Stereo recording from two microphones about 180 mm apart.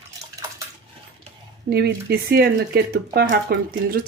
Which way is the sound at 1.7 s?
60° right (ahead or behind).